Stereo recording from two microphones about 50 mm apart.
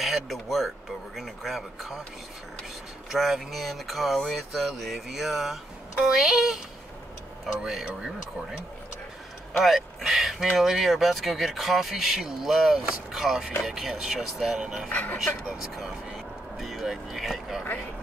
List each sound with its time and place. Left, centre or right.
0.0 s speech: centre
3.1 s speech: centre
14.9 s speech: left
16.5 s speech: centre